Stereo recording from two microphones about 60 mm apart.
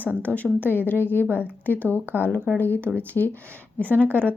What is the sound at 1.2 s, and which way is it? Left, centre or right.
Speech, right.